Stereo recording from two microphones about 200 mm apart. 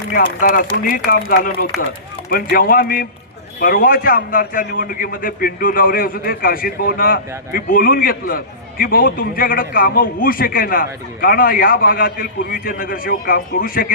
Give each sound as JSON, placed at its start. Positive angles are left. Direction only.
{"t": 0.1, "sound": "a man's voice", "side_deg": 45}